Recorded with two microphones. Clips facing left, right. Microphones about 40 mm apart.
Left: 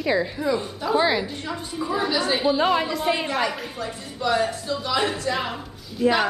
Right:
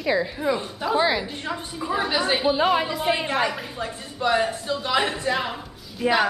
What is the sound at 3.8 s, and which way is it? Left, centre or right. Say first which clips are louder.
Speech: right 2 dB; right.